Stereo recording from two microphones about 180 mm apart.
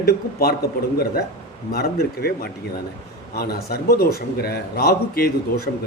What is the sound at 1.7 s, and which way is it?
A man's voice, 60° left (ahead or behind).